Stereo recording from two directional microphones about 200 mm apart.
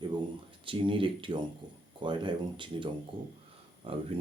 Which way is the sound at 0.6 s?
25° right (ahead or behind).